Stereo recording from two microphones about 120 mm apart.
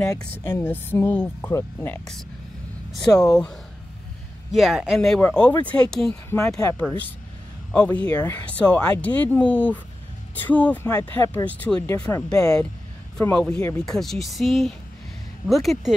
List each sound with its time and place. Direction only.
0.5 s speech: 15° left (ahead or behind)
1.5 s speech: 25° left (ahead or behind)
3.1 s speech: 20° left (ahead or behind)
4.5 s speech: 5° right (ahead or behind); by 5.8 s 15° left (ahead or behind)
6.0 s speech: 25° left (ahead or behind)
12.2 s speech: 5° left (ahead or behind)